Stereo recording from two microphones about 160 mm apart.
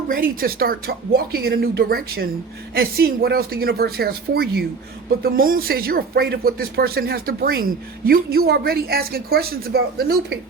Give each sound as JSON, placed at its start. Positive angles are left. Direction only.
{"t": 0.1, "sound": "speech", "side_deg": -65}
{"t": 5.2, "sound": "speech", "side_deg": -60}